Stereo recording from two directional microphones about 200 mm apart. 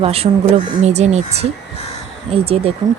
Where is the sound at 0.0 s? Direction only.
30° right (ahead or behind).